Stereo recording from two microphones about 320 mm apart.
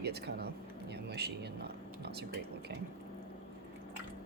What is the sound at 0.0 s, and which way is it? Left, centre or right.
Speech, right.